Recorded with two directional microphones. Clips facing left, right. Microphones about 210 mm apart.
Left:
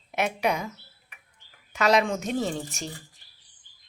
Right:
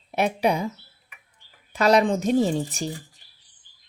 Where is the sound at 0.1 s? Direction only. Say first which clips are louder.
Right 4 dB; 35° right (ahead or behind).